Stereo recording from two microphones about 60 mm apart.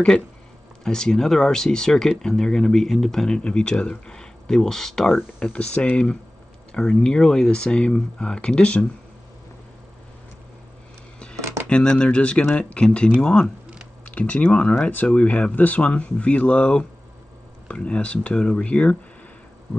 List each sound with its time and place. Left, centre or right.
0.8 s speech: centre
11.3 s a sound: right
11.7 s speech: centre